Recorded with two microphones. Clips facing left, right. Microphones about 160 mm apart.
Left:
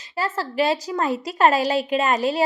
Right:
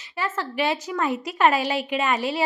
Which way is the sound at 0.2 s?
35° left (ahead or behind).